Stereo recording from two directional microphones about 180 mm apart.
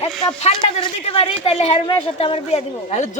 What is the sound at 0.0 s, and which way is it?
A woman's voice, 30° left (ahead or behind).